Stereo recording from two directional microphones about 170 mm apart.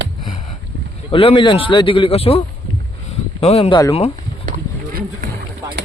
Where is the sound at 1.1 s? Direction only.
30° left (ahead or behind).